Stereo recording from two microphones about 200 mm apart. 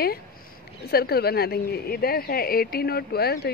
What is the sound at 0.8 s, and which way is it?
Speech, 50° left (ahead or behind).